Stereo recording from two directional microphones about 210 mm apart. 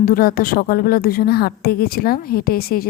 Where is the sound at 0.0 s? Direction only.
45° left (ahead or behind).